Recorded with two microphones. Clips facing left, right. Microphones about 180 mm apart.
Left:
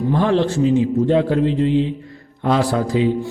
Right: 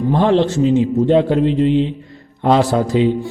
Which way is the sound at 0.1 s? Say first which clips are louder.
Right 3 dB; 25° right (ahead or behind).